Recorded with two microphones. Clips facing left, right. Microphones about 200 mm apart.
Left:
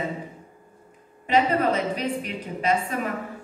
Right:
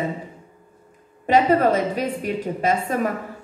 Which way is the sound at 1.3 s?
45° right (ahead or behind).